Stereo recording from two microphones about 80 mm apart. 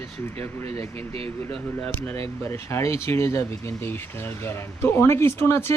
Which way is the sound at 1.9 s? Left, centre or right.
Left.